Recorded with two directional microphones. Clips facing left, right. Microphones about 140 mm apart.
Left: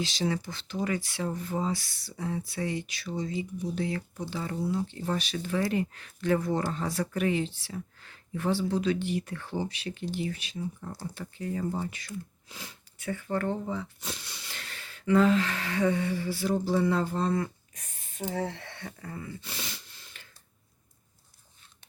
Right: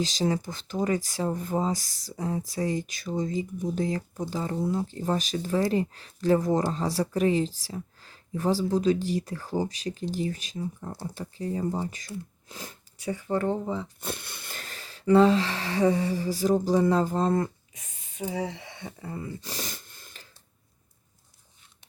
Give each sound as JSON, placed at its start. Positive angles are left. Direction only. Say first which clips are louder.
{"t": 0.0, "sound": "speech", "louder": "right 3 dB", "side_deg": -40}
{"t": 14.0, "sound": "speech", "louder": "right 5 dB", "side_deg": -55}
{"t": 17.7, "sound": "speech", "louder": "right 2 dB", "side_deg": -5}
{"t": 19.0, "sound": "a sound", "louder": "right 5 dB", "side_deg": -35}